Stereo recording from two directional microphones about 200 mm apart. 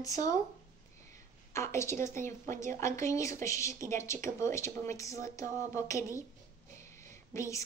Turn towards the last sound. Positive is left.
turn(degrees=15)  # may be behind; listen again after turning